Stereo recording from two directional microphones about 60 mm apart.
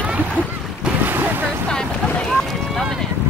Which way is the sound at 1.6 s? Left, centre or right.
Centre.